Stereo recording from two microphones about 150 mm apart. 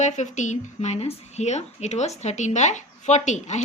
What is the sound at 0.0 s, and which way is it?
Speech, 55° left (ahead or behind).